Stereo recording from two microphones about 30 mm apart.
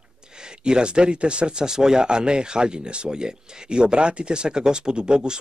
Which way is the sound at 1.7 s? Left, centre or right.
Right.